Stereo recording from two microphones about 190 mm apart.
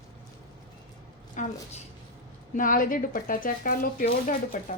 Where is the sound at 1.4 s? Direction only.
40° left (ahead or behind).